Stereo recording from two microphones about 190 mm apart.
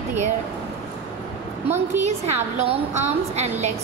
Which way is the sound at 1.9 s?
35° right (ahead or behind).